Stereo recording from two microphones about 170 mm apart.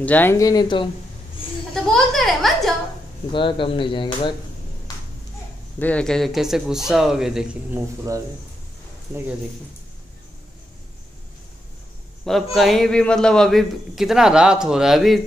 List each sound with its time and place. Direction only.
0.0 s speech: 10° left (ahead or behind); by 0.8 s 25° left (ahead or behind)
1.7 s a sound: centre (ahead or behind)
3.3 s speech: 30° left (ahead or behind)
5.8 s a man's voice: 10° left (ahead or behind)
12.5 s a man's voice: centre (ahead or behind)